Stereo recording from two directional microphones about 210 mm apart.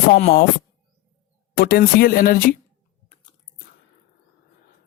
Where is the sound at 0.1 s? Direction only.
45° left (ahead or behind).